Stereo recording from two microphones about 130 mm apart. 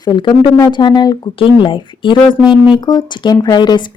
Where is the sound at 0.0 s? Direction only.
35° left (ahead or behind).